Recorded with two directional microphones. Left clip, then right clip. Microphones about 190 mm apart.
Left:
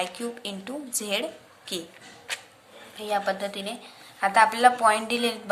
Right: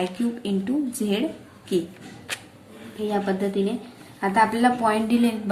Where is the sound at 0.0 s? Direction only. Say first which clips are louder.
Right 3 dB; 25° left (ahead or behind).